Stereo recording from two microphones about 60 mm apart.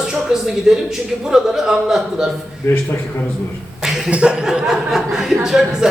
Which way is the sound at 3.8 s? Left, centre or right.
Centre.